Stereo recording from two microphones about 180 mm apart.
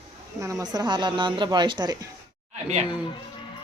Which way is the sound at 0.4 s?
20° right (ahead or behind).